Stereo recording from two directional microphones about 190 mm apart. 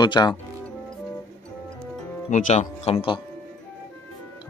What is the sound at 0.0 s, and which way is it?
Speech, 25° left (ahead or behind).